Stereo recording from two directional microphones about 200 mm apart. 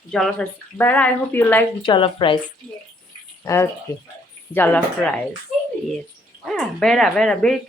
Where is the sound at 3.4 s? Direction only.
15° left (ahead or behind).